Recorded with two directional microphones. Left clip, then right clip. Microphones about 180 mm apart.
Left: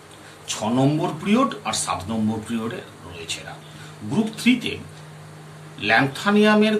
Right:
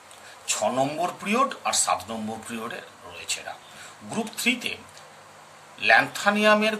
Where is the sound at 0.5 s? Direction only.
45° right (ahead or behind).